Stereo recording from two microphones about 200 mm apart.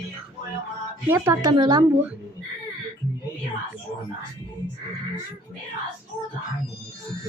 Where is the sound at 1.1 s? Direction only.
15° right (ahead or behind).